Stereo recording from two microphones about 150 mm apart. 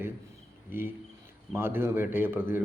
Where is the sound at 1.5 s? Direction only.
15° right (ahead or behind).